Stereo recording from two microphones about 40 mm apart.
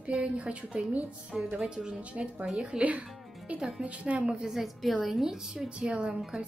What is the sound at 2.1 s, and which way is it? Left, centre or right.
Speech, right.